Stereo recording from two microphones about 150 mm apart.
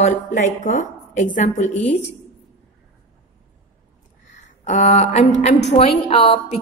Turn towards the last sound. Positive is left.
turn(degrees=40)  # may be behind; listen again after turning